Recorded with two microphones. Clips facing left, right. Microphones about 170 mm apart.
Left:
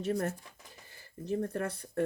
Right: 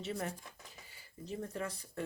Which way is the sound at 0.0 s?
50° left (ahead or behind).